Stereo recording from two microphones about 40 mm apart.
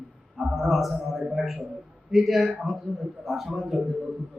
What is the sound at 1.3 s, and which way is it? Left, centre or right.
A man's voice, centre.